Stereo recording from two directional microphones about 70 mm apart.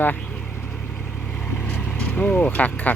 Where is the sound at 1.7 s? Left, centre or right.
Centre.